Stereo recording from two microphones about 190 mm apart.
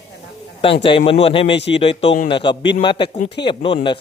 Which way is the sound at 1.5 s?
65° left (ahead or behind).